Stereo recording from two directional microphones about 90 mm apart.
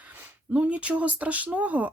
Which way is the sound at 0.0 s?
20° right (ahead or behind).